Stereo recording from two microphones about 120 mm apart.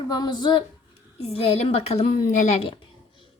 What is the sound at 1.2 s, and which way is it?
A woman's voice, 55° left (ahead or behind).